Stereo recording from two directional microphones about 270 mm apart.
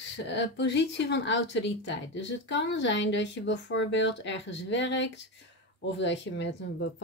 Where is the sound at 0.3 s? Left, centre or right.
Left.